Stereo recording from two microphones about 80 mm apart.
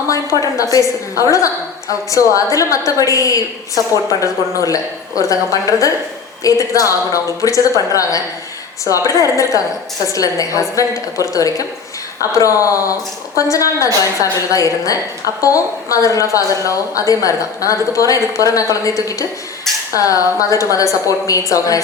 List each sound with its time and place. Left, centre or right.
0.1 s a woman's voice: left